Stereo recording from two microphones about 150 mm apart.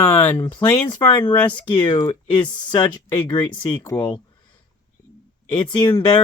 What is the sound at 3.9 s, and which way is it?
Speech, 5° left (ahead or behind).